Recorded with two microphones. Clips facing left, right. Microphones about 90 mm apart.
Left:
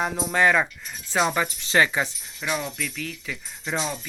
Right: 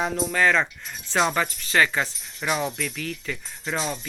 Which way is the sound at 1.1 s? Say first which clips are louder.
Even; 10° left (ahead or behind).